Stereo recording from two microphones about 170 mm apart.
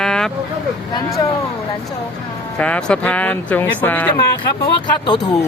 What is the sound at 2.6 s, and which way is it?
Speech, 5° left (ahead or behind).